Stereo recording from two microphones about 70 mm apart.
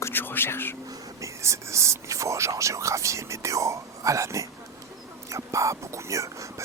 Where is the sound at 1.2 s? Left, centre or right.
Right.